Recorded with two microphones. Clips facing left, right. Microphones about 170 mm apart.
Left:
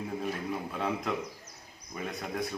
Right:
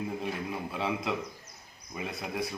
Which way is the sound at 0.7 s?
5° right (ahead or behind).